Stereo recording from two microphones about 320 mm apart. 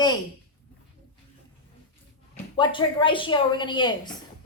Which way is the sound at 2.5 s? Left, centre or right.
Centre.